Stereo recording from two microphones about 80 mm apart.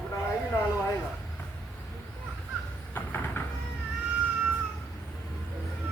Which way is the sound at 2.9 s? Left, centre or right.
Left.